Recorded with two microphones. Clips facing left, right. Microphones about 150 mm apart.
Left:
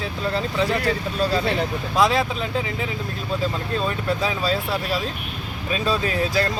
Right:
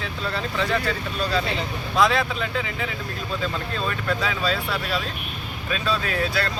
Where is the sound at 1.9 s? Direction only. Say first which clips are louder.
Left 1 dB; 35° left (ahead or behind).